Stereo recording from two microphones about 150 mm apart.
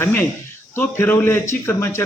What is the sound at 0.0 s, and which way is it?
A man's voice, 15° left (ahead or behind).